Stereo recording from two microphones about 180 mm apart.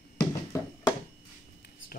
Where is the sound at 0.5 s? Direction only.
15° left (ahead or behind).